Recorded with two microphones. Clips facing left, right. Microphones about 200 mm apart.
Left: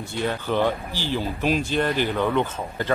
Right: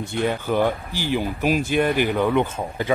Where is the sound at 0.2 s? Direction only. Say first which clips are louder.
Right 2 dB; 15° right (ahead or behind).